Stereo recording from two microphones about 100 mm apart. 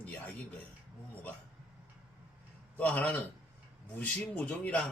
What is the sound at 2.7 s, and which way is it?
Speech, 15° left (ahead or behind).